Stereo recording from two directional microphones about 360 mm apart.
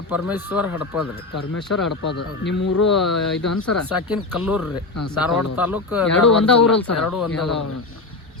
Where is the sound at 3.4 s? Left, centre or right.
Left.